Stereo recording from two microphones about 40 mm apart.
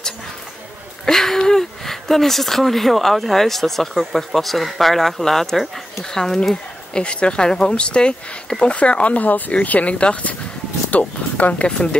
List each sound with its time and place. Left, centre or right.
1.0 s speech: centre
6.9 s speech: left